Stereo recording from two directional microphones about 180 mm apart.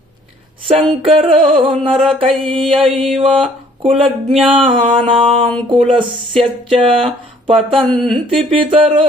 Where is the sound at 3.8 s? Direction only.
30° right (ahead or behind).